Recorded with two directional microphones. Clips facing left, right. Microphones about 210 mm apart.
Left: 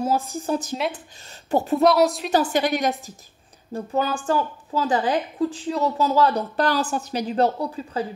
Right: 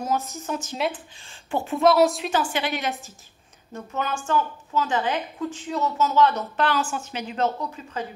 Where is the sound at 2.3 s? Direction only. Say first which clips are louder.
Left 5 dB; 40° left (ahead or behind).